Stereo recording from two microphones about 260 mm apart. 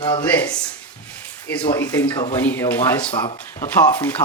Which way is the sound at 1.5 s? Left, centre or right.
Centre.